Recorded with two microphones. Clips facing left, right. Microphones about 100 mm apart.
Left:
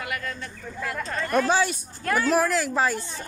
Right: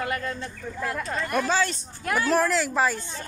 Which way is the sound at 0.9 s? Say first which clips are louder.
Left 4 dB; 5° right (ahead or behind).